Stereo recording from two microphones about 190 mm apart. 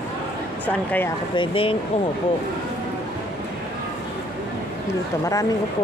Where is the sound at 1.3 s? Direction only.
30° left (ahead or behind).